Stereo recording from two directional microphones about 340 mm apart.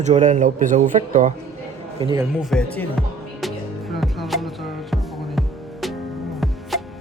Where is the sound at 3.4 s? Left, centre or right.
Centre.